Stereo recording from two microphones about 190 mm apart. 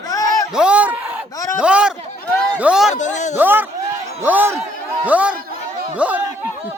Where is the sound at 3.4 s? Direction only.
10° right (ahead or behind).